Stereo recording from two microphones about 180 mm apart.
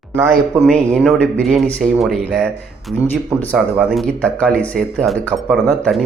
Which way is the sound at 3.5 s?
5° right (ahead or behind).